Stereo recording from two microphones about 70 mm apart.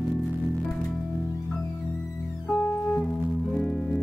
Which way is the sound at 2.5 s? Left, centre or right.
Left.